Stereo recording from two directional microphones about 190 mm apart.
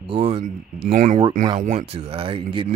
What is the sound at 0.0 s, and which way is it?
Speech, 30° right (ahead or behind).